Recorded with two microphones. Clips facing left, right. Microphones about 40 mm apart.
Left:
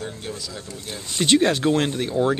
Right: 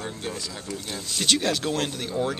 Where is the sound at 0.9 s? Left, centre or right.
Centre.